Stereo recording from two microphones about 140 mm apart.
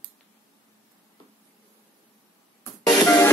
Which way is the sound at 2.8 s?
25° left (ahead or behind).